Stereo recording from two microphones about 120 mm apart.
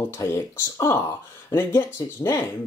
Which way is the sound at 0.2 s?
25° left (ahead or behind).